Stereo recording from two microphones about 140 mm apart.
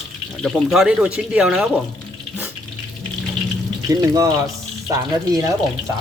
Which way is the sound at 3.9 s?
25° right (ahead or behind).